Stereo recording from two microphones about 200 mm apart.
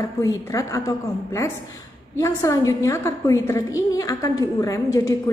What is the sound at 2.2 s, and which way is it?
A woman's voice, 15° left (ahead or behind).